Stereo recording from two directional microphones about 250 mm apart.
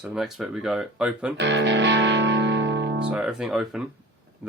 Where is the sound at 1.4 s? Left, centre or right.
Right.